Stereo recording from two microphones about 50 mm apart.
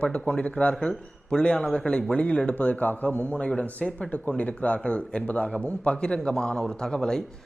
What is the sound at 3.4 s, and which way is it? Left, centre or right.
Speech, centre.